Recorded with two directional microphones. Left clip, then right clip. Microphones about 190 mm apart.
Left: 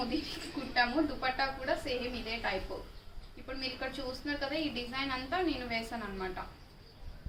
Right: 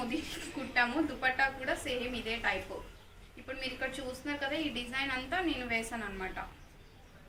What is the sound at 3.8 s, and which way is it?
A woman's voice, centre (ahead or behind).